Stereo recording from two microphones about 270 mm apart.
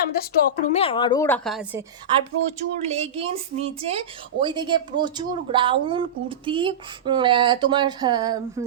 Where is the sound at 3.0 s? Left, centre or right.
Right.